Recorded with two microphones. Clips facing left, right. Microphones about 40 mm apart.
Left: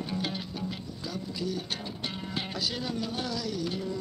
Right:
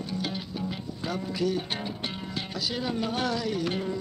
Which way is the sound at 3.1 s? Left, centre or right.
Right.